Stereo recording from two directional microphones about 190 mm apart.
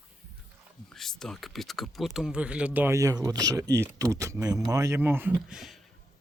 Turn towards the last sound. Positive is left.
turn(degrees=0)  # may be behind; listen again after turning